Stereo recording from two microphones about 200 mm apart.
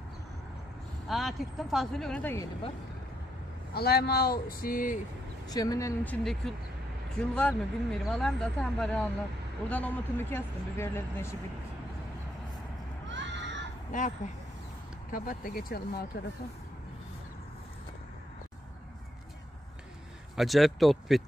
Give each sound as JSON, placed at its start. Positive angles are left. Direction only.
{"t": 1.0, "sound": "speech", "side_deg": 0}
{"t": 3.7, "sound": "speech", "side_deg": 50}
{"t": 5.5, "sound": "speech", "side_deg": 15}
{"t": 7.2, "sound": "speech", "side_deg": 5}
{"t": 13.1, "sound": "a sound", "side_deg": -65}
{"t": 13.9, "sound": "speech", "side_deg": 40}
{"t": 20.3, "sound": "speech", "side_deg": 0}